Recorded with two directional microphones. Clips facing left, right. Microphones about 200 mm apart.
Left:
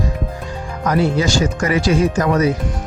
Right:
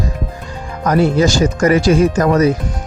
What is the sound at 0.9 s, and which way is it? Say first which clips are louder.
Speech: right 4 dB; 45° right (ahead or behind).